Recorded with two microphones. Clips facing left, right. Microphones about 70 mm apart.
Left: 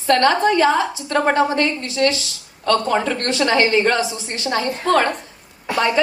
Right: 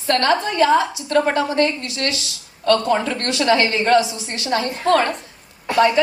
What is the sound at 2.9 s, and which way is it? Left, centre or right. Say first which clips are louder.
A man's voice: even; left.